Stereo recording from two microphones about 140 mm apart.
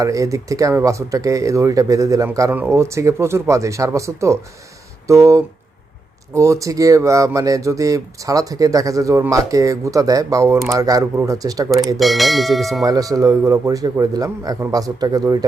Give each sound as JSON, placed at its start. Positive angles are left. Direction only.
{"t": 0.0, "sound": "speech", "side_deg": -25}
{"t": 11.9, "sound": "bell", "side_deg": 0}
{"t": 12.8, "sound": "speech", "side_deg": -25}